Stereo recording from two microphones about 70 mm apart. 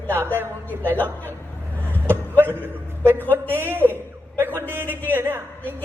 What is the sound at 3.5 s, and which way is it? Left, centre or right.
Speech, right.